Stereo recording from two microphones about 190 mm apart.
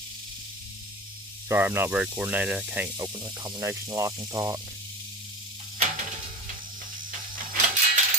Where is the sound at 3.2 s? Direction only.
20° right (ahead or behind).